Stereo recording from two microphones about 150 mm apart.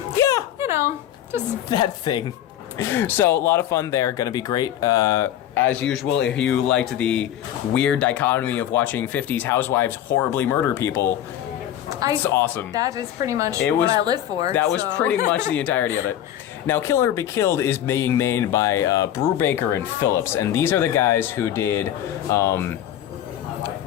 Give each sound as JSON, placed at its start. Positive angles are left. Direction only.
{"t": 0.2, "sound": "a sound", "side_deg": 20}
{"t": 0.6, "sound": "a sound", "side_deg": -20}
{"t": 1.7, "sound": "speech", "side_deg": 30}
{"t": 2.7, "sound": "speech", "side_deg": 15}
{"t": 5.9, "sound": "speech", "side_deg": 5}
{"t": 11.9, "sound": "a sound", "side_deg": -25}
{"t": 12.2, "sound": "speech", "side_deg": 15}
{"t": 12.7, "sound": "a woman's voice", "side_deg": -25}
{"t": 13.6, "sound": "speech", "side_deg": 10}
{"t": 13.9, "sound": "a woman's voice", "side_deg": -25}
{"t": 14.5, "sound": "speech", "side_deg": 10}